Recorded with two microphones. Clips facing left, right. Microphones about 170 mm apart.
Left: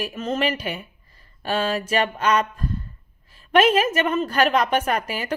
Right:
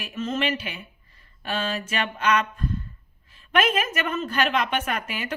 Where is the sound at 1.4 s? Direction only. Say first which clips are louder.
Left 5 dB; 35° left (ahead or behind).